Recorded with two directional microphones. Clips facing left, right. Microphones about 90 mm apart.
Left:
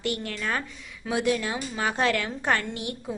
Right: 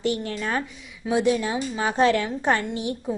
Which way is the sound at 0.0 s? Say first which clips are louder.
Right 4 dB; 25° right (ahead or behind).